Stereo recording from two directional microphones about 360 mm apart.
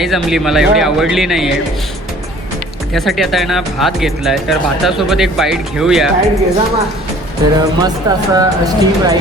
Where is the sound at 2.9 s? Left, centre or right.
Centre.